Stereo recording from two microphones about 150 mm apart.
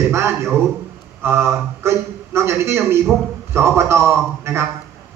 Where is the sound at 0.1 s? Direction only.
15° right (ahead or behind).